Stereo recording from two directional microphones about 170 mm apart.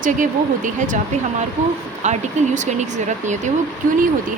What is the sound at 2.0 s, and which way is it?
Speech, 45° right (ahead or behind).